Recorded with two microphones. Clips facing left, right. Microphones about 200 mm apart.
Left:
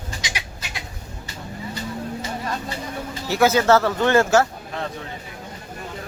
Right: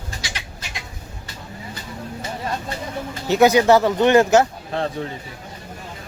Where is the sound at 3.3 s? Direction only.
20° right (ahead or behind).